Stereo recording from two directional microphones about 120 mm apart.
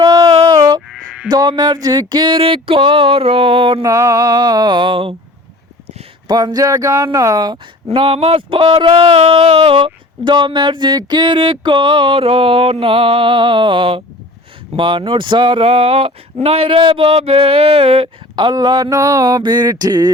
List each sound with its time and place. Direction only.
0.0 s a sound: 30° right (ahead or behind)
0.9 s a sound: 5° right (ahead or behind)
1.3 s speech: 40° right (ahead or behind)
3.8 s music: 25° right (ahead or behind); by 5.1 s 45° right (ahead or behind)
6.2 s speech: 35° right (ahead or behind)
7.9 s speech: 50° right (ahead or behind); by 20.1 s 35° right (ahead or behind)